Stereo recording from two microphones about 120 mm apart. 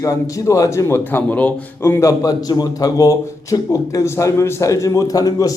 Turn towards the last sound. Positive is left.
turn(degrees=30)  # may be behind; listen again after turning